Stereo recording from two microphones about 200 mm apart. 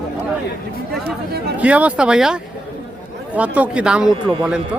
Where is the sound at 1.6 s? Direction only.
5° right (ahead or behind).